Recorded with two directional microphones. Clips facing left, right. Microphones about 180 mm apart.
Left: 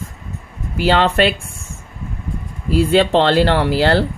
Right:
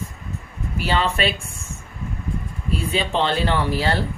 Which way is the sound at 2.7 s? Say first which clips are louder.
Left 10 dB; 80° left.